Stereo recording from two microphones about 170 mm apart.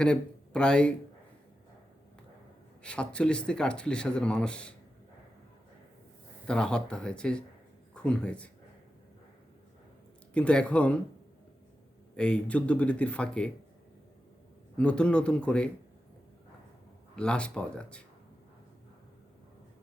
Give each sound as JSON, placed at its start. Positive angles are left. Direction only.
{"t": 0.0, "sound": "speech", "side_deg": 5}
{"t": 2.8, "sound": "speech", "side_deg": 5}
{"t": 6.5, "sound": "speech", "side_deg": 5}
{"t": 10.3, "sound": "speech", "side_deg": 5}
{"t": 12.1, "sound": "speech", "side_deg": 5}
{"t": 14.8, "sound": "speech", "side_deg": 5}
{"t": 17.2, "sound": "speech", "side_deg": 5}